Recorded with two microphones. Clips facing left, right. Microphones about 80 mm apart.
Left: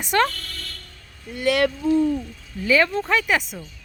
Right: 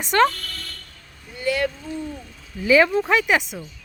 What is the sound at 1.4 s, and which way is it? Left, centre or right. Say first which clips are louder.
Speech: left 3 dB; left.